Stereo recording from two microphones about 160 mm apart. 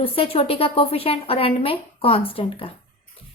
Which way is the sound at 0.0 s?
35° left (ahead or behind).